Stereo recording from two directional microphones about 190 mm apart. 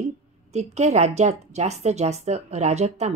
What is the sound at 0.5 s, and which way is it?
A woman's voice, 35° right (ahead or behind).